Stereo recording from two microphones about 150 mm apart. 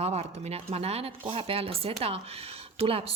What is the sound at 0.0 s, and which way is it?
Speech, 45° right (ahead or behind).